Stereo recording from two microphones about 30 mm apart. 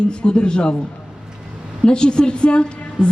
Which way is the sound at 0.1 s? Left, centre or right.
Left.